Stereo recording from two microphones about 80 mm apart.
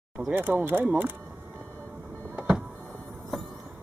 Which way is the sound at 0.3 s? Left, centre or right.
Right.